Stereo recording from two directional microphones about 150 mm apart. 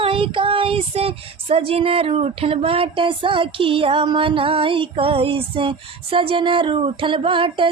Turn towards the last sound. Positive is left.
turn(degrees=-35)  # may be behind; listen again after turning